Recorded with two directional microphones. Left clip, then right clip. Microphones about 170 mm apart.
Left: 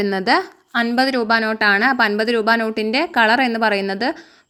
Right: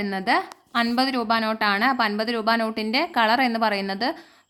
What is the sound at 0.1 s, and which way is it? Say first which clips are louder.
A woman's voice: left 5 dB; 25° left (ahead or behind).